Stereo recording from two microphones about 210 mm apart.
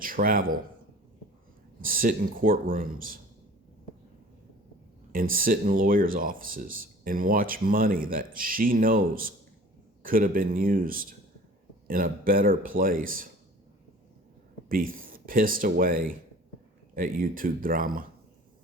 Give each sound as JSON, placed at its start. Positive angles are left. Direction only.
{"t": 0.0, "sound": "speech", "side_deg": -40}
{"t": 1.8, "sound": "speech", "side_deg": -40}
{"t": 5.3, "sound": "speech", "side_deg": -40}
{"t": 14.7, "sound": "speech", "side_deg": -45}